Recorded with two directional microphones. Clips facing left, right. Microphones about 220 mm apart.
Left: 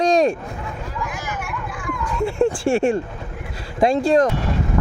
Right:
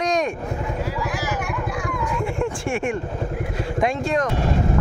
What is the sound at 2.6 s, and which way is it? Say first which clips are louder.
Speech: left 6 dB; 30° left (ahead or behind).